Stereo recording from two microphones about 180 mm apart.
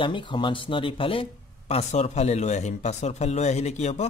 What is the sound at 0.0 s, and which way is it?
Speech, 25° left (ahead or behind).